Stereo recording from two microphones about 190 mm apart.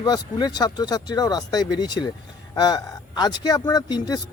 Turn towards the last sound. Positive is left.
turn(degrees=20)  # may be behind; listen again after turning